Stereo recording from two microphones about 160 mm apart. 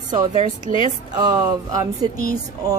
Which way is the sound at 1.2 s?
25° right (ahead or behind).